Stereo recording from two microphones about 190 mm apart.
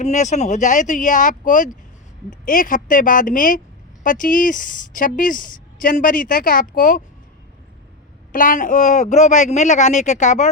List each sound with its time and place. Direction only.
0.0 s a woman's voice: 40° left (ahead or behind)
8.3 s speech: 45° left (ahead or behind)